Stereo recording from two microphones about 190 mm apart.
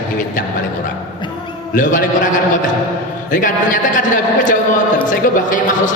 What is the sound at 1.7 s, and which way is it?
Speech, 45° left (ahead or behind).